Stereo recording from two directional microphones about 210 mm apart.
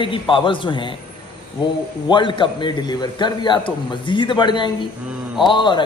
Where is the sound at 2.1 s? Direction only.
20° left (ahead or behind).